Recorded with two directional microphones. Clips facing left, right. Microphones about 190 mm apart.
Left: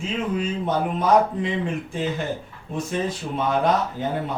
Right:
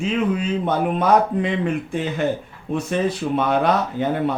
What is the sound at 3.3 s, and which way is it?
Speech, 65° right (ahead or behind).